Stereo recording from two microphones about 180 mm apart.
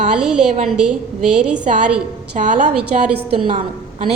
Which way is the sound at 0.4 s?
40° right (ahead or behind).